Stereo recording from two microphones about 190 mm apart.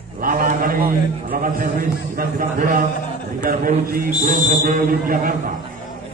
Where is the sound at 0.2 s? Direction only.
45° right (ahead or behind).